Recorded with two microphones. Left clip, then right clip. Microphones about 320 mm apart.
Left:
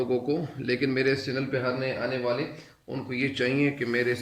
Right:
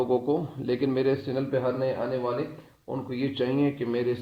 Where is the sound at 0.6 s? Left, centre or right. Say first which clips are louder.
Even; right.